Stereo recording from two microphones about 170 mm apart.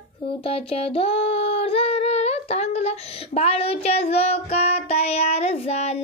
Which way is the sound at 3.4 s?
35° left (ahead or behind).